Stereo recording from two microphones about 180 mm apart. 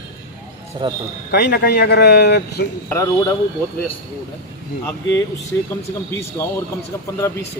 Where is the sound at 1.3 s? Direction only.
60° left (ahead or behind).